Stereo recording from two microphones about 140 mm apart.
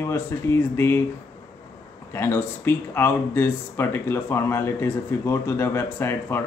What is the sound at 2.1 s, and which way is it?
Speech, 15° left (ahead or behind).